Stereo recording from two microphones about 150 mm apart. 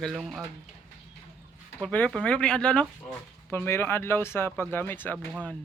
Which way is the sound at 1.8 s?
10° left (ahead or behind).